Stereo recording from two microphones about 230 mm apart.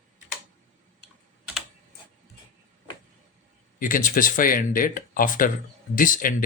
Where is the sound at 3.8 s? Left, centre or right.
Left.